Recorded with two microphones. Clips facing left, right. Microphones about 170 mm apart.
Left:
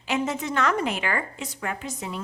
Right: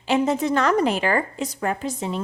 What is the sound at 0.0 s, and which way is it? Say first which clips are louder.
A woman's voice: right 6 dB; 30° right (ahead or behind).